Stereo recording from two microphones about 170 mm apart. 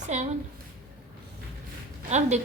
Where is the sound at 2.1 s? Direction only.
40° right (ahead or behind).